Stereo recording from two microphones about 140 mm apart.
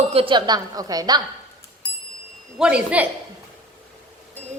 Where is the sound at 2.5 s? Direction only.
5° right (ahead or behind).